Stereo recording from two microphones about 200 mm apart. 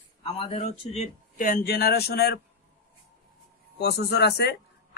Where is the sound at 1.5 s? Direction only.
50° left (ahead or behind).